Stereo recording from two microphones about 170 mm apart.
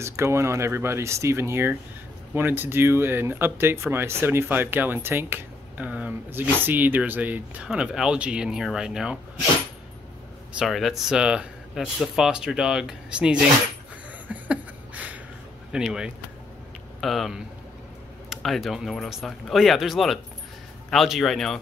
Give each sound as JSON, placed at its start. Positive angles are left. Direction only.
{"t": 0.0, "sound": "speech", "side_deg": -15}
{"t": 10.6, "sound": "speech", "side_deg": 0}
{"t": 14.2, "sound": "a sound", "side_deg": -10}
{"t": 15.7, "sound": "speech", "side_deg": -5}